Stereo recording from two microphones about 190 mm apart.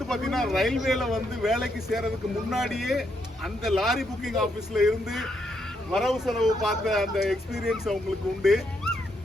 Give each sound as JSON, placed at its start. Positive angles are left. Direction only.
{"t": 0.1, "sound": "speech", "side_deg": 0}